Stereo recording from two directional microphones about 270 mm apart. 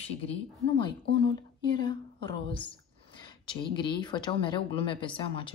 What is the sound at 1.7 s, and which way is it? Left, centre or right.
A woman's voice, centre.